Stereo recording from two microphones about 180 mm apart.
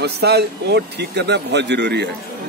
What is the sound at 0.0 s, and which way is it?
Speech, 65° right (ahead or behind).